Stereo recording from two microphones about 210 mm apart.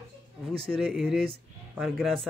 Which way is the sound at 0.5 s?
Centre (ahead or behind).